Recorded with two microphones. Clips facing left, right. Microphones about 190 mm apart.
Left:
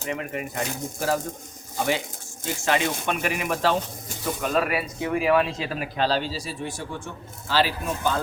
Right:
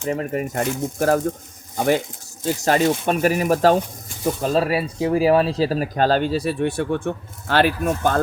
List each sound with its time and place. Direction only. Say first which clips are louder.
0.1 s speech: right 7 dB; 40° right (ahead or behind)
4.4 s speech: right 4 dB; 30° right (ahead or behind); by 8.2 s 55° right (ahead or behind)